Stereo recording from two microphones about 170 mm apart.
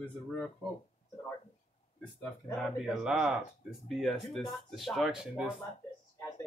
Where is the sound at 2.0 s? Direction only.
Centre (ahead or behind).